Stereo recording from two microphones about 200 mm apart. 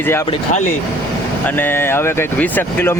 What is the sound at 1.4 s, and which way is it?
Speech, 10° left (ahead or behind).